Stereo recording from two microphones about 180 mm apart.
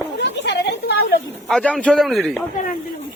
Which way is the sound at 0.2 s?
70° left (ahead or behind).